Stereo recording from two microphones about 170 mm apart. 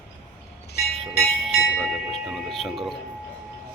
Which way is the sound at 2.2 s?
Centre (ahead or behind).